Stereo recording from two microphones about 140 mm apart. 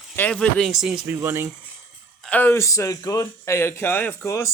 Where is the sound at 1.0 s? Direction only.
15° right (ahead or behind).